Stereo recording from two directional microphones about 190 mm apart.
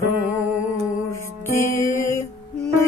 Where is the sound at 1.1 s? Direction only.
10° left (ahead or behind).